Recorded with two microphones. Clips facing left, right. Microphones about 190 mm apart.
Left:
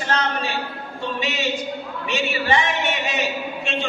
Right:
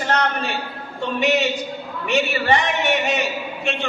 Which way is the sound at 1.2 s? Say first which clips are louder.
Right 7 dB; 60° right (ahead or behind).